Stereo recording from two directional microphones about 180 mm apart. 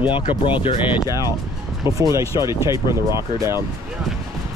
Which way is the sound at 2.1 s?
20° right (ahead or behind).